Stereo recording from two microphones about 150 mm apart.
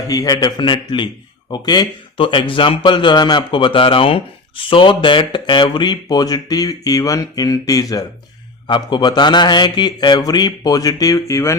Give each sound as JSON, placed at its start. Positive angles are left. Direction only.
{"t": 0.1, "sound": "a man's voice", "side_deg": 25}